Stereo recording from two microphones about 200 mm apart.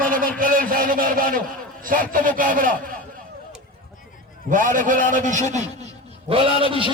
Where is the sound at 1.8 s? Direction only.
45° right (ahead or behind).